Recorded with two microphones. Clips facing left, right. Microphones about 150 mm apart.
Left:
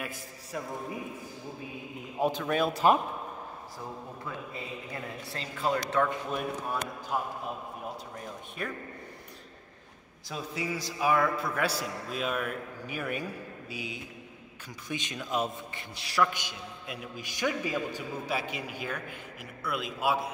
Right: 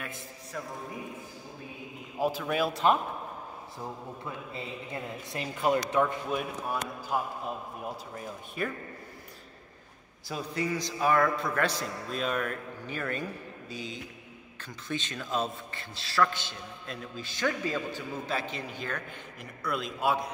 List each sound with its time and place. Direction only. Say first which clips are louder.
2.1 s speech: left 1 dB; centre (ahead or behind)
4.6 s a man's voice: right 1 dB; 20° right (ahead or behind)
6.3 s speech: even; 5° right (ahead or behind)
10.3 s a man's voice: right 3 dB; centre (ahead or behind)